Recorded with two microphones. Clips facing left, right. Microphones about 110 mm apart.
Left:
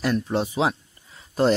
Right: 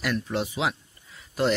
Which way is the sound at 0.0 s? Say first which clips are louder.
Left 4 dB; 30° left (ahead or behind).